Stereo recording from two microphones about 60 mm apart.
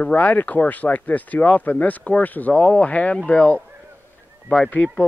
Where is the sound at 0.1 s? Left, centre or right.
Left.